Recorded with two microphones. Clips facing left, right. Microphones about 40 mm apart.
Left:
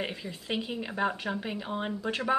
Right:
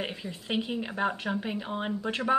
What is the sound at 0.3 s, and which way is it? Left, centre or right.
Speech, centre.